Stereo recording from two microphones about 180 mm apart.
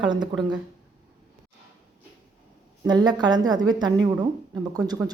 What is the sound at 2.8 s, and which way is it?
Speech, 20° right (ahead or behind).